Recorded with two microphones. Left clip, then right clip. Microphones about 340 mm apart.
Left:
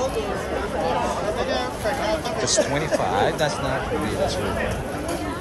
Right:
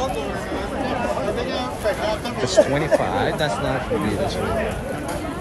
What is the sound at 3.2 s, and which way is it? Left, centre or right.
Speech, centre.